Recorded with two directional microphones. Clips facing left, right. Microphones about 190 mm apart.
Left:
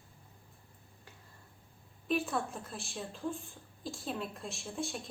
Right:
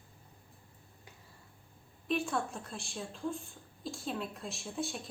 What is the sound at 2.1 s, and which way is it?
A woman's voice, centre (ahead or behind).